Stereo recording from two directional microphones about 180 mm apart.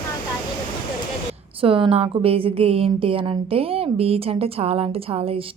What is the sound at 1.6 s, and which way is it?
A woman's voice, 30° right (ahead or behind).